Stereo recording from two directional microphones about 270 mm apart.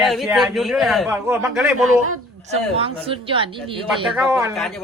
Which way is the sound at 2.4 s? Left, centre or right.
Right.